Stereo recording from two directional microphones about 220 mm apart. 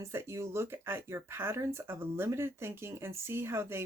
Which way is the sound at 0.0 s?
15° right (ahead or behind).